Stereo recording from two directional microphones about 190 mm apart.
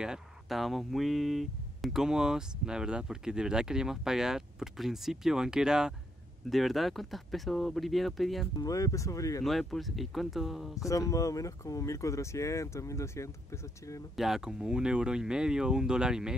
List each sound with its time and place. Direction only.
0.0 s speech: centre (ahead or behind)
8.5 s speech: 20° left (ahead or behind)
9.4 s speech: centre (ahead or behind)
10.9 s speech: 15° left (ahead or behind)
14.1 s speech: centre (ahead or behind)